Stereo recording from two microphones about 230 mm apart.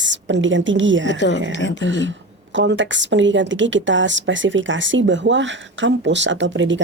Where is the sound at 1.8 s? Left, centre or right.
Right.